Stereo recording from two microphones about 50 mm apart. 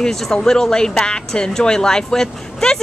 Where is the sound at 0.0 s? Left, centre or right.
Centre.